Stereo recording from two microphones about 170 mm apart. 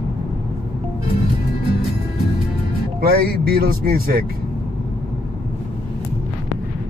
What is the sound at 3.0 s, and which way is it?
Speech, 65° right (ahead or behind).